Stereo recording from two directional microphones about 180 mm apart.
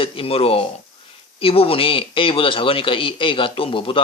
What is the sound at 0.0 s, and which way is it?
A man's voice, 30° left (ahead or behind).